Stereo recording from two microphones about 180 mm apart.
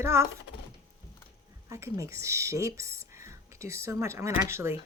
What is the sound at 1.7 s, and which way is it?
Speech, 15° right (ahead or behind).